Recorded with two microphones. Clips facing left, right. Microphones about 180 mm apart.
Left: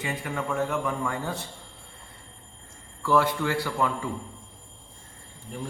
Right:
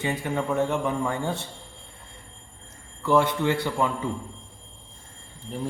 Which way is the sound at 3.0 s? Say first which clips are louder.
Right 2 dB; 20° right (ahead or behind).